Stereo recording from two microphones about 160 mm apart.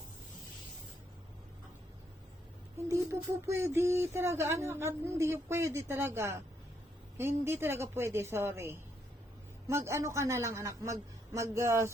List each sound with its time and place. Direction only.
2.7 s speech: 20° right (ahead or behind)